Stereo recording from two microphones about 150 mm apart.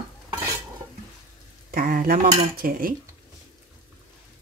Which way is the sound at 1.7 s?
75° right (ahead or behind).